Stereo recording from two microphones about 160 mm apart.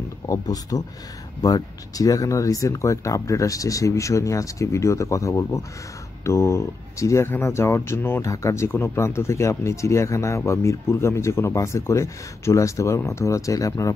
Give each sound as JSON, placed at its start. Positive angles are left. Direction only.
{"t": 0.3, "sound": "speech", "side_deg": 20}